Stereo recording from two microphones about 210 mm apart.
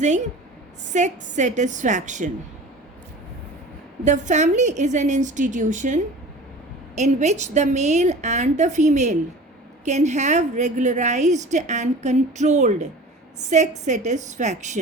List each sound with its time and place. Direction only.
0.9 s a woman's voice: 35° right (ahead or behind)
4.0 s a woman's voice: 35° right (ahead or behind)